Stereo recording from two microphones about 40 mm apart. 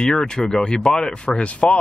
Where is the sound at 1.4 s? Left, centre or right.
Left.